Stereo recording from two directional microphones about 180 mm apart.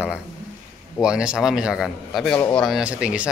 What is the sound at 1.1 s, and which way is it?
A man's voice, 5° right (ahead or behind).